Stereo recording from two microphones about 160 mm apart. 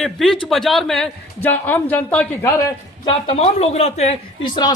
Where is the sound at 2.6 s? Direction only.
30° left (ahead or behind).